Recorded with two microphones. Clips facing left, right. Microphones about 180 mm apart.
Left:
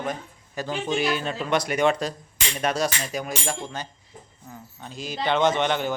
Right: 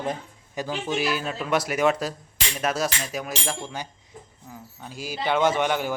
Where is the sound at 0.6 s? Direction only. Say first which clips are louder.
Left 1 dB; 5° right (ahead or behind).